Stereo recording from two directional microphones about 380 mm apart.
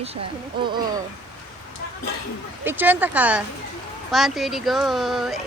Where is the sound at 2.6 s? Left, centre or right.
Centre.